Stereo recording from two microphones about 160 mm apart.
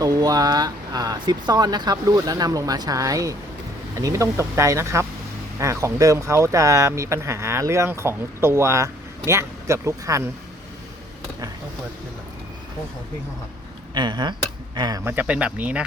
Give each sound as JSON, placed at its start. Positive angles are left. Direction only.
{"t": 0.0, "sound": "speech", "side_deg": -25}
{"t": 13.9, "sound": "speech", "side_deg": -30}